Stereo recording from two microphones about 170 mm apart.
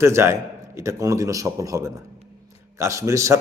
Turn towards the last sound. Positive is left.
turn(degrees=-15)  # may be behind; listen again after turning